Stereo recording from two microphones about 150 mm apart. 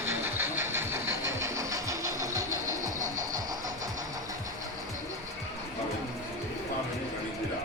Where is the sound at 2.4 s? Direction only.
60° right (ahead or behind).